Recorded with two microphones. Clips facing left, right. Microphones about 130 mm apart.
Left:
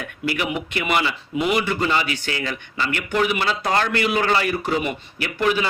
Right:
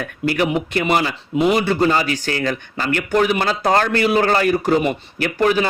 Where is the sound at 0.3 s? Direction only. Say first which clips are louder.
Right 6 dB; 40° right (ahead or behind).